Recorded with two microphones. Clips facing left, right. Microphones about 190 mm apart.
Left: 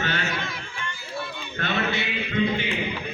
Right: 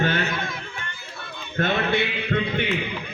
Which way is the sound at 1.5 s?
50° right (ahead or behind).